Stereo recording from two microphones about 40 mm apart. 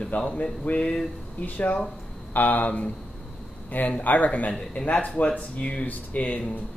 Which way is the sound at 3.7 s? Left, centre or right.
Left.